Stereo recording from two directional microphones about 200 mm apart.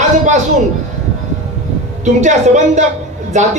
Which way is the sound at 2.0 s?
35° right (ahead or behind).